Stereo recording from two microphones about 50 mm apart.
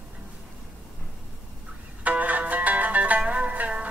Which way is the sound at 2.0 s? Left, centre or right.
Right.